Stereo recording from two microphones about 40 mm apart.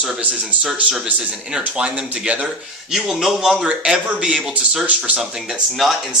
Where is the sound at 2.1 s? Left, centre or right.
Right.